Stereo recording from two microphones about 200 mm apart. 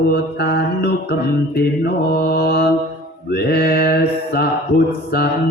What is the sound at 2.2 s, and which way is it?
Mantra, 50° left (ahead or behind).